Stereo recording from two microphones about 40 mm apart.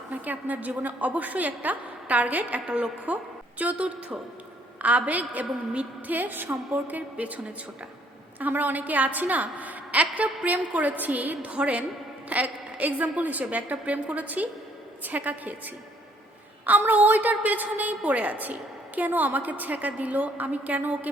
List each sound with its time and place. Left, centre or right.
0.1 s a woman's voice: right
2.6 s a woman's voice: right
3.6 s a woman's voice: right